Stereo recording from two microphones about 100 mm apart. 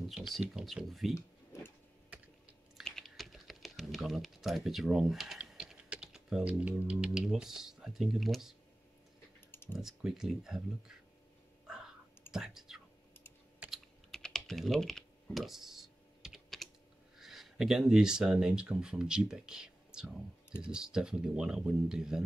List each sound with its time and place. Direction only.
0.1 s speech: 5° right (ahead or behind)
1.1 s a sound: 25° left (ahead or behind)
2.8 s typing: centre (ahead or behind)
6.6 s speech: 15° right (ahead or behind)
9.5 s typing: 25° left (ahead or behind)
9.8 s speech: 5° right (ahead or behind)
11.6 s clicking: 5° right (ahead or behind)
12.3 s whispering: 5° right (ahead or behind)
13.7 s typing: 5° left (ahead or behind)
17.2 s speech: centre (ahead or behind)